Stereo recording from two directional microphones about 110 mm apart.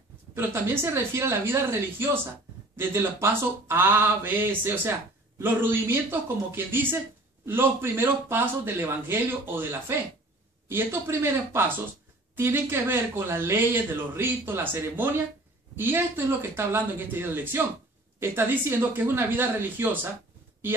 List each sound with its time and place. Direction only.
0.3 s a man's voice: 20° right (ahead or behind)